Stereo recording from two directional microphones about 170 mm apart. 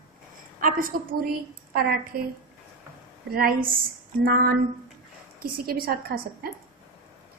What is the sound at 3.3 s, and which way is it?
A woman's voice, 60° right (ahead or behind).